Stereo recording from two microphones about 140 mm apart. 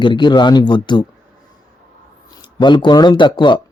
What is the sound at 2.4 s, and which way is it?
Speech, 35° left (ahead or behind).